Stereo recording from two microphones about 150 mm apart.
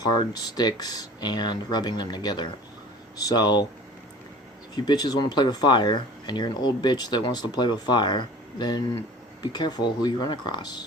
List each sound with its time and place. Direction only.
0.0 s speech: 30° left (ahead or behind)
4.7 s speech: 25° left (ahead or behind)